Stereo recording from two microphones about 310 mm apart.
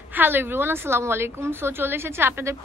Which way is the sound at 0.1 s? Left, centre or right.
Centre.